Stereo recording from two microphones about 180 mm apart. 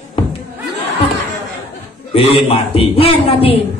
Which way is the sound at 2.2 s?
30° left (ahead or behind).